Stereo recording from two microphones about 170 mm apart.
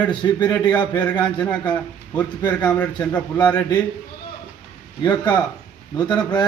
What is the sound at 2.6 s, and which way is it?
Speech, 5° left (ahead or behind).